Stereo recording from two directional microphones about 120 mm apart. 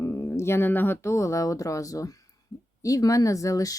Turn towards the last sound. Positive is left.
turn(degrees=30)  # may be behind; listen again after turning